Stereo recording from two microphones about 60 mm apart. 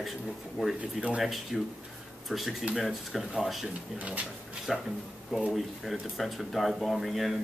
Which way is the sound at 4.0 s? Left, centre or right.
Right.